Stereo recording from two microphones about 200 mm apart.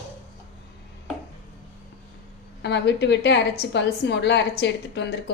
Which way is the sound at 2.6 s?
60° left (ahead or behind).